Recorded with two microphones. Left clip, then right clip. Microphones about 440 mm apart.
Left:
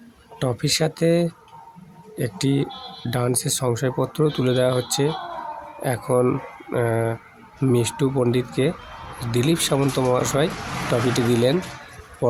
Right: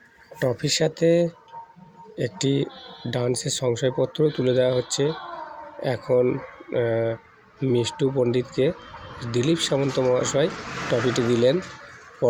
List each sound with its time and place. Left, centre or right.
0.3 s speech: left